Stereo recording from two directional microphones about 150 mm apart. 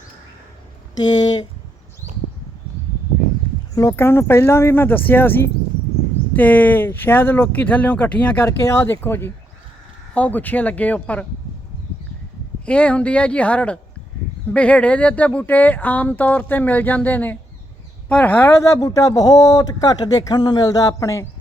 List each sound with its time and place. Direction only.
3.8 s speech: 20° left (ahead or behind)
12.6 s speech: 5° left (ahead or behind)
18.7 s speech: 25° left (ahead or behind)